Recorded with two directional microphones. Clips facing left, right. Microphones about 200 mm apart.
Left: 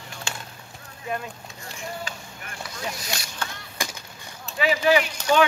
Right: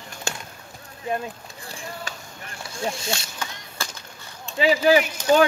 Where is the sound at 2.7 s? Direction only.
25° right (ahead or behind).